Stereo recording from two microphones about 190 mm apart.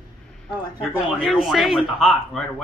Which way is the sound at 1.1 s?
Centre (ahead or behind).